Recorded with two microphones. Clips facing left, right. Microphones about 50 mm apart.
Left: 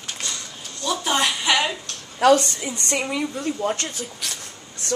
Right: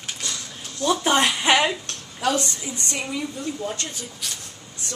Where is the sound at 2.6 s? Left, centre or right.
Left.